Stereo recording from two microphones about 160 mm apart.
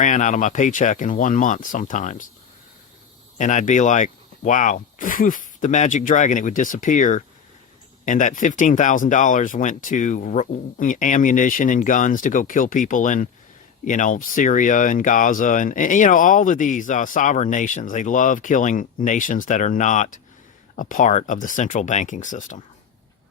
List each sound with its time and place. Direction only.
0.0 s speech: 50° left (ahead or behind)
3.3 s speech: 50° left (ahead or behind)